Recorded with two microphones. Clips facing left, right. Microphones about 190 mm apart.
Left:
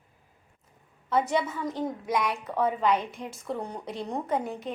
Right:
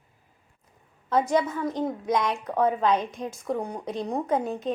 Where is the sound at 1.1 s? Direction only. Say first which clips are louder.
Right 3 dB; 15° right (ahead or behind).